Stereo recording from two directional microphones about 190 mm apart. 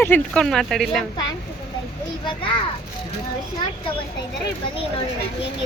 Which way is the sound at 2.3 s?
25° left (ahead or behind).